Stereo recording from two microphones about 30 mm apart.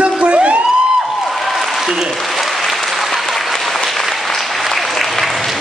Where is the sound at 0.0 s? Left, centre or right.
Right.